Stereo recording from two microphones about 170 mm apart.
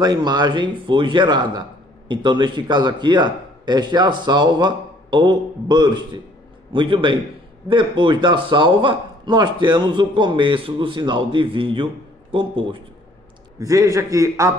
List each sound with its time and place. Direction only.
0.0 s a man's voice: 25° right (ahead or behind)
13.6 s a man's voice: 20° right (ahead or behind)